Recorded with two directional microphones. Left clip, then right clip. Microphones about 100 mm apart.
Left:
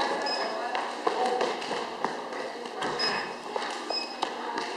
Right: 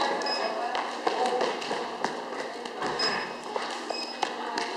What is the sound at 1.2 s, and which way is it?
Tap, 5° right (ahead or behind).